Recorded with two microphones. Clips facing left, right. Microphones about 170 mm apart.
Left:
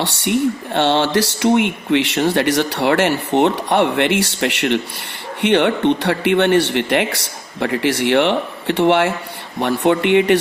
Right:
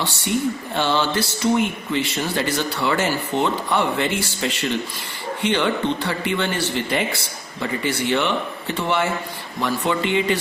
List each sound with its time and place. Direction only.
0.0 s speech: 75° left (ahead or behind)
9.6 s speech: 60° left (ahead or behind)